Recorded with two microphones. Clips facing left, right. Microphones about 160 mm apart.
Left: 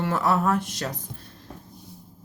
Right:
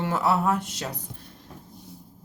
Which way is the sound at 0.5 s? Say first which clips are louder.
Left 3 dB; 80° left.